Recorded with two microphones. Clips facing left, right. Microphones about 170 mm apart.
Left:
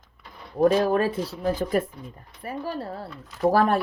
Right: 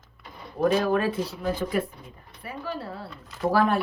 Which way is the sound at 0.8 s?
40° left (ahead or behind).